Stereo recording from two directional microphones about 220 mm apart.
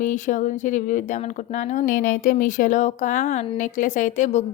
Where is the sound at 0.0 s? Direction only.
35° left (ahead or behind).